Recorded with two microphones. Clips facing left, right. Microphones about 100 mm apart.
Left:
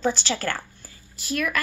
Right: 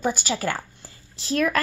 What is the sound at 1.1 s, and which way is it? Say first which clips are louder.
Speech: right 4 dB; 30° right (ahead or behind).